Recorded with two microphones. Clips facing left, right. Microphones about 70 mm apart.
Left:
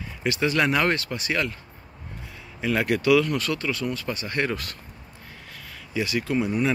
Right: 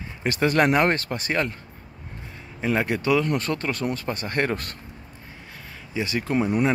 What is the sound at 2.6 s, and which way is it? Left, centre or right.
Speech, right.